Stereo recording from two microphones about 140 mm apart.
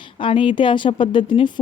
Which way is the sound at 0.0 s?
35° left (ahead or behind).